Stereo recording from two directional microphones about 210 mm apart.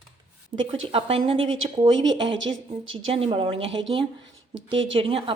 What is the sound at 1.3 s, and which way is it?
Speech, 70° right (ahead or behind).